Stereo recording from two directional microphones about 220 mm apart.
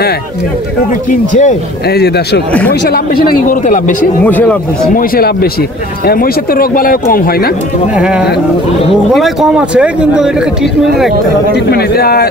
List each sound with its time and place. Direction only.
1.4 s a man's voice: 45° left (ahead or behind)
4.2 s speech: 5° left (ahead or behind)
4.9 s a man's voice: 40° left (ahead or behind)
7.9 s speech: 5° right (ahead or behind)
11.5 s a man's voice: 45° left (ahead or behind)